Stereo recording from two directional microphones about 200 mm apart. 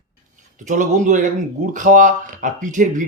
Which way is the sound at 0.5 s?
40° right (ahead or behind).